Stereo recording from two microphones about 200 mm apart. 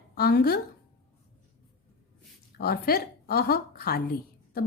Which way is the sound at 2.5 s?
50° left (ahead or behind).